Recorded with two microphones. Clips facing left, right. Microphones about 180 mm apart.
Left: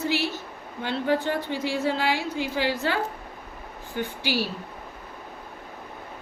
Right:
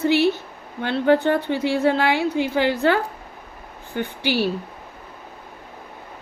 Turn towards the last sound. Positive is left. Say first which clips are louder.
# right 4 dB
turn(degrees=-60)  # may be behind; listen again after turning